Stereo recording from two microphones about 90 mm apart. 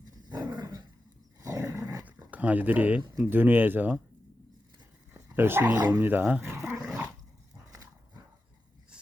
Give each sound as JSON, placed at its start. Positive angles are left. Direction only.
{"t": 0.0, "sound": "dog", "side_deg": -50}
{"t": 1.4, "sound": "dog", "side_deg": -35}
{"t": 2.0, "sound": "a sound", "side_deg": -15}
{"t": 3.2, "sound": "speech", "side_deg": -25}
{"t": 5.1, "sound": "dog", "side_deg": -25}
{"t": 5.9, "sound": "speech", "side_deg": -20}
{"t": 6.4, "sound": "dog", "side_deg": -30}
{"t": 6.8, "sound": "dog", "side_deg": -10}
{"t": 7.7, "sound": "dog", "side_deg": -40}